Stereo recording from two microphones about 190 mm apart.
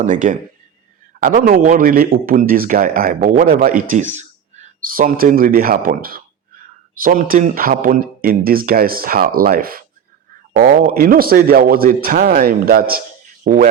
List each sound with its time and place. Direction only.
0.0 s speech: 45° right (ahead or behind)